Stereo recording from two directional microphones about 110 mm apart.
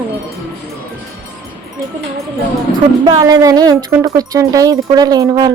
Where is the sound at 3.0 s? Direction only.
40° right (ahead or behind).